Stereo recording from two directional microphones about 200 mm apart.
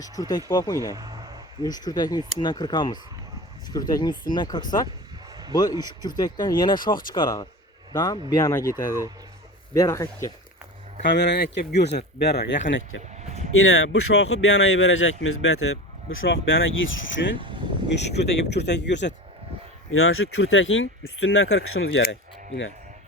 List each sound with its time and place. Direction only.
0.0 s speech: 20° left (ahead or behind)
0.9 s a sound: 20° right (ahead or behind)
1.6 s speech: 20° left (ahead or behind)
9.7 s speech: 15° left (ahead or behind)
11.0 s speech: 60° left (ahead or behind)
12.6 s speech: 70° left (ahead or behind)
13.8 s speech: 90° left; by 17.3 s 70° left (ahead or behind)
17.9 s speech: 60° left (ahead or behind)
19.9 s speech: 90° left; by 22.7 s 60° left (ahead or behind)